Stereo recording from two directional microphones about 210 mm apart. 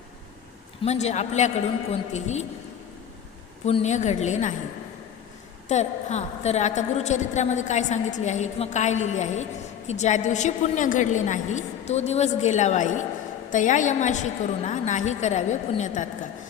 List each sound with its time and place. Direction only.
0.9 s a woman's voice: 30° left (ahead or behind)
3.7 s a woman's voice: 30° left (ahead or behind)
5.6 s a woman's voice: 30° left (ahead or behind)